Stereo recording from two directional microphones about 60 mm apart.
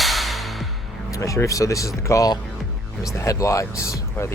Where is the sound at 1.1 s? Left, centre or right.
Left.